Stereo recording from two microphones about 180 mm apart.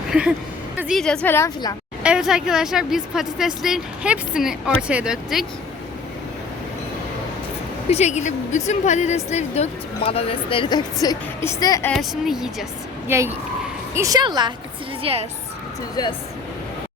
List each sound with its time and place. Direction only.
0.1 s a woman's voice: 5° right (ahead or behind); by 1.7 s 15° left (ahead or behind)
2.0 s a woman's voice: 5° right (ahead or behind)
7.9 s a woman's voice: 35° left (ahead or behind); by 11.9 s 15° left (ahead or behind)
11.9 s a woman's voice: centre (ahead or behind)
13.1 s a woman's voice: 15° right (ahead or behind); by 15.3 s 35° right (ahead or behind)